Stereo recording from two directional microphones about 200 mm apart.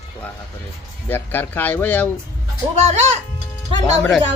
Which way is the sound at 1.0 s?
10° left (ahead or behind).